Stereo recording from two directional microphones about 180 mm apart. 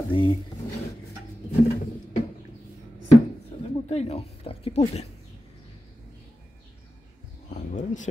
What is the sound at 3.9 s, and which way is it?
Speech, 35° left (ahead or behind).